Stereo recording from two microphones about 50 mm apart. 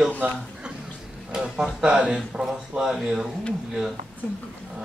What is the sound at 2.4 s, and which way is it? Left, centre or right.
Speech, centre.